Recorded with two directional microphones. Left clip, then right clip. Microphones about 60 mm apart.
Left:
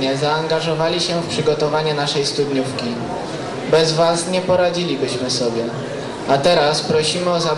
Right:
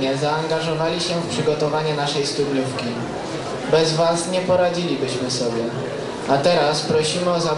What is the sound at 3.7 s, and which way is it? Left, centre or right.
Speech, left.